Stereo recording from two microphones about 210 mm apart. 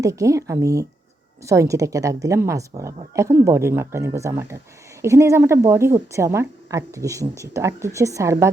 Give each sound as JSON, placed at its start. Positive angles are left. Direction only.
{"t": 0.0, "sound": "a woman's voice", "side_deg": -15}